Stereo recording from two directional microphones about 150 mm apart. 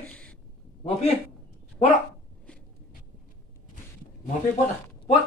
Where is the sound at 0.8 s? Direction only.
45° left (ahead or behind).